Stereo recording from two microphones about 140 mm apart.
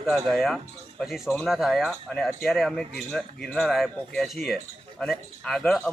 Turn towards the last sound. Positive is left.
turn(degrees=5)  # may be behind; listen again after turning